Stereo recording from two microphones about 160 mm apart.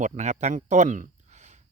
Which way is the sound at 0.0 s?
45° right (ahead or behind).